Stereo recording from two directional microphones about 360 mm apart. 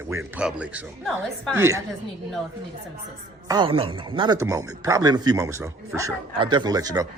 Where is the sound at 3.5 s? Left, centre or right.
Centre.